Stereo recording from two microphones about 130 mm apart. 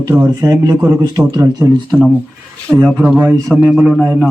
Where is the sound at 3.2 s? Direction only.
20° right (ahead or behind).